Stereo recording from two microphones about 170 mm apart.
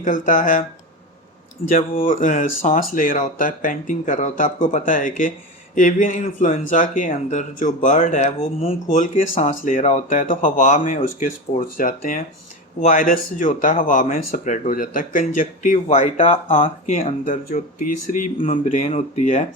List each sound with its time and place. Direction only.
0.0 s speech: 50° left (ahead or behind)
1.7 s speech: 55° left (ahead or behind)